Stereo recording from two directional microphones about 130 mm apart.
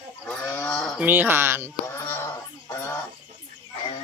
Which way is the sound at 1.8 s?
15° left (ahead or behind).